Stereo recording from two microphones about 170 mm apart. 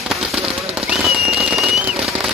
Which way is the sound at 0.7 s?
Centre (ahead or behind).